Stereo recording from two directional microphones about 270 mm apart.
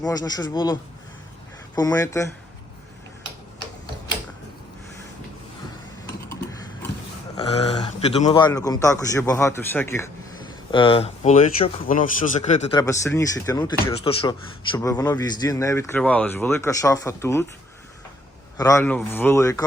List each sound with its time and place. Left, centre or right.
0.0 s speech: centre
6.2 s a sound: centre
7.3 s a man's voice: left
12.8 s speech: centre
18.5 s speech: centre